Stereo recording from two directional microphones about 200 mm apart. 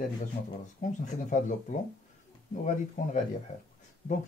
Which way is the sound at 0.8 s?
40° left (ahead or behind).